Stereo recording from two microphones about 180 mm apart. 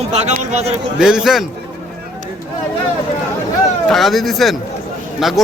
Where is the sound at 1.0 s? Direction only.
5° right (ahead or behind).